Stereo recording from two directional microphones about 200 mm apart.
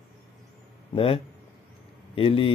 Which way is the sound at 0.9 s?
30° left (ahead or behind).